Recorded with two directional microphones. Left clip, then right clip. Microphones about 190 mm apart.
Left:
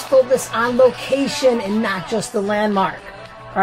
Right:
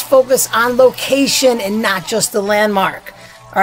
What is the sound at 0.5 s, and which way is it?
Speech, 25° right (ahead or behind).